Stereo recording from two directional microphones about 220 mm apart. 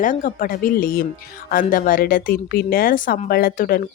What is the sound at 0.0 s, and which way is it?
Speech, 35° left (ahead or behind).